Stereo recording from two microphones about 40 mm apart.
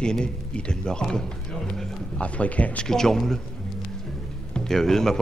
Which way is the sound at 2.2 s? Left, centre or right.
Left.